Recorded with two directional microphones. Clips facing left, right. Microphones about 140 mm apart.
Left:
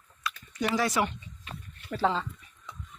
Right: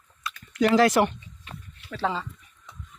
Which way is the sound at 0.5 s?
90° right.